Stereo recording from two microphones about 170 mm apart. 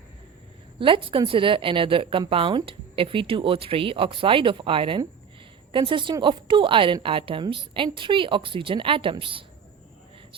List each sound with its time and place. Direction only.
0.8 s a woman's voice: 30° right (ahead or behind)